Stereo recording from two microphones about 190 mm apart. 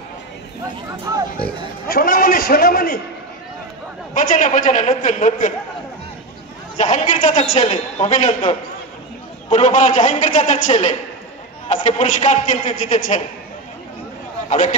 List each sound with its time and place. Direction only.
1.1 s speech: 20° right (ahead or behind)
1.9 s a man's voice: 50° left (ahead or behind)
4.1 s a man's voice: 45° left (ahead or behind)
6.8 s a man's voice: 40° left (ahead or behind)
9.5 s a man's voice: 40° left (ahead or behind)
14.5 s a man's voice: 40° left (ahead or behind)